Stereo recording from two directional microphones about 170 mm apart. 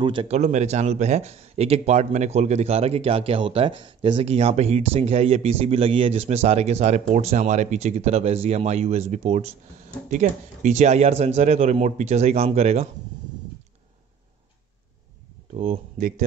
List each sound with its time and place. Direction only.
0.0 s a man's voice: 30° right (ahead or behind)
15.5 s speech: 50° right (ahead or behind)